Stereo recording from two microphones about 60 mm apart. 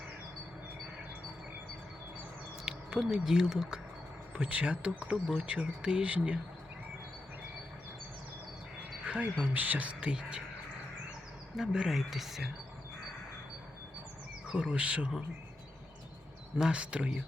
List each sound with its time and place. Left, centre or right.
2.6 s speech: centre
9.1 s a sound: right
9.4 s speech: right
11.5 s speech: centre
14.4 s speech: centre
16.6 s speech: centre